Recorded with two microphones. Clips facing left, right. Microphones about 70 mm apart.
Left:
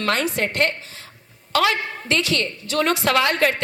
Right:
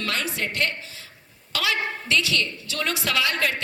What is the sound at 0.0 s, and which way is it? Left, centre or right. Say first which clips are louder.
A woman's voice: left 6 dB; left.